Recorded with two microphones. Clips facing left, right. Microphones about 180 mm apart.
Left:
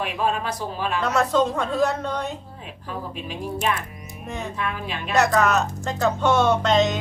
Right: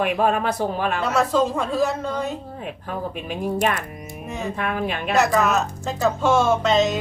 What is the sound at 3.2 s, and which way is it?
Speech, 50° right (ahead or behind).